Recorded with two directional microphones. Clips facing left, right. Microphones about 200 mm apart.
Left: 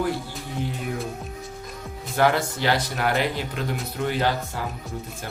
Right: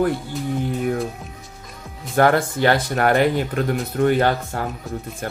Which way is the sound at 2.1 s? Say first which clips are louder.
Right 5 dB; 50° right (ahead or behind).